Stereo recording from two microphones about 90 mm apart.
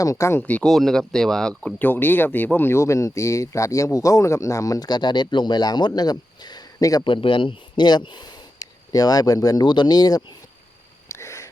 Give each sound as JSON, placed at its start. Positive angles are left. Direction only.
{"t": 0.0, "sound": "speech", "side_deg": 35}
{"t": 0.6, "sound": "speech", "side_deg": 5}
{"t": 1.8, "sound": "speech", "side_deg": 20}
{"t": 7.0, "sound": "speech", "side_deg": 70}
{"t": 11.1, "sound": "wheeze", "side_deg": 35}